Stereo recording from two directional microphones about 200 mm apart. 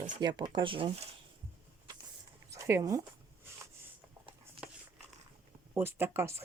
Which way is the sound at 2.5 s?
15° right (ahead or behind).